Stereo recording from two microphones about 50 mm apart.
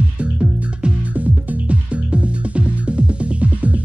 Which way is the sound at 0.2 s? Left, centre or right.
Right.